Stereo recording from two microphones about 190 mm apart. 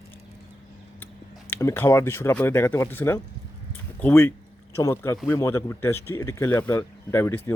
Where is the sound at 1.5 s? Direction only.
15° left (ahead or behind).